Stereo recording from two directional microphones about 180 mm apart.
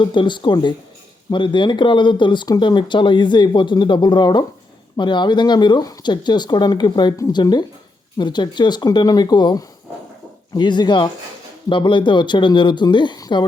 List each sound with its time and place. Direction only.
0.0 s speech: 25° left (ahead or behind)